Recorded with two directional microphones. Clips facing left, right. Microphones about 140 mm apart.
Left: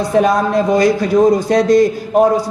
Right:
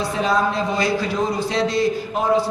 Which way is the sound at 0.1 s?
55° left (ahead or behind).